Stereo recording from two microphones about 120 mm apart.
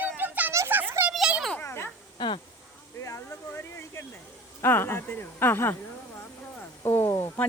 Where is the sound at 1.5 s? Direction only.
20° left (ahead or behind).